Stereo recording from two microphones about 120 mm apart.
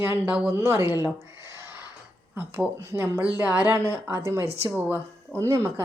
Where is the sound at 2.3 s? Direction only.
15° right (ahead or behind).